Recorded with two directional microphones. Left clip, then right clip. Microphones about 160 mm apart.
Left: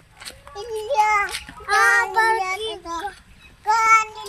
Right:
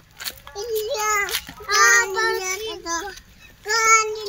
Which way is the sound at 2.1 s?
20° left (ahead or behind).